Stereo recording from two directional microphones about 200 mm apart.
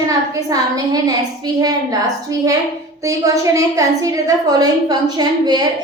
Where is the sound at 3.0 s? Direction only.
15° right (ahead or behind).